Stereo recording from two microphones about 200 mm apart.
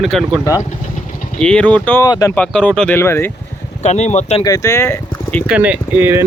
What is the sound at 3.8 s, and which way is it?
Speech, 35° left (ahead or behind).